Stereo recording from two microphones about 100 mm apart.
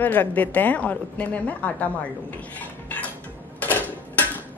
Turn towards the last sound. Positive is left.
turn(degrees=15)  # may be behind; listen again after turning